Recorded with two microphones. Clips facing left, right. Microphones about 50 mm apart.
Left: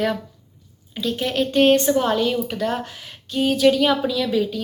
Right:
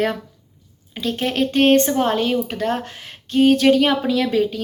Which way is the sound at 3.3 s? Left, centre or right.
Right.